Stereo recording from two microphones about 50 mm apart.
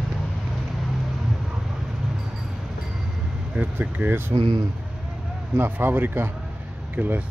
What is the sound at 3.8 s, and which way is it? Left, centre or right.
Speech, right.